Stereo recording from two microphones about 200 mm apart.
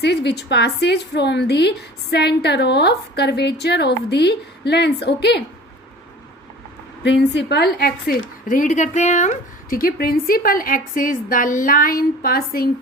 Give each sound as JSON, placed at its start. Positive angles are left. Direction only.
{"t": 0.0, "sound": "a woman's voice", "side_deg": 55}
{"t": 7.0, "sound": "a woman's voice", "side_deg": 60}